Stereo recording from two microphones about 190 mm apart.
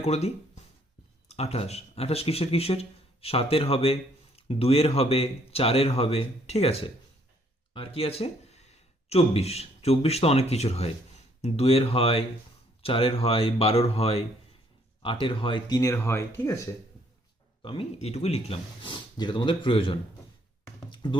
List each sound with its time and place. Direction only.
0.0 s speech: 35° left (ahead or behind); by 16.6 s 15° left (ahead or behind)
17.6 s speech: 30° left (ahead or behind)
20.9 s music: 25° left (ahead or behind)